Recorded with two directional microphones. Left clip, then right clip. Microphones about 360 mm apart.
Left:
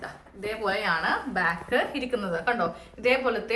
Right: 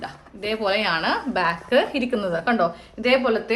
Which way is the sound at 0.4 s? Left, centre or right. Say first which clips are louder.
Right 5 dB; right.